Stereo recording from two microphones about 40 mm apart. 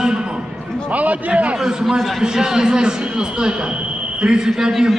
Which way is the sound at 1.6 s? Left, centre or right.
Centre.